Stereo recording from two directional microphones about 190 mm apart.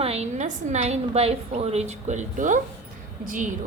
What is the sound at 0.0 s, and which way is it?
A woman's voice, 35° right (ahead or behind).